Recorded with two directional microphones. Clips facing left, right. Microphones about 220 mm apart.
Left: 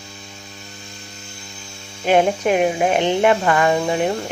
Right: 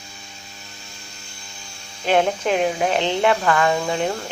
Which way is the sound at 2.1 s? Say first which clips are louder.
Left 3 dB; 15° left (ahead or behind).